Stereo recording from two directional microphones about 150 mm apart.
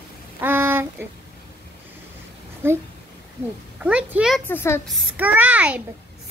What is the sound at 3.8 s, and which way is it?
Speech, 5° right (ahead or behind).